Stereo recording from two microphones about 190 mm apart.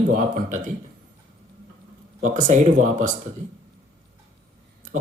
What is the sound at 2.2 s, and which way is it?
Speech, 40° right (ahead or behind).